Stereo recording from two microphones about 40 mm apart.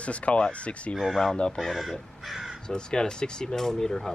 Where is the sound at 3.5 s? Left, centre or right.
Centre.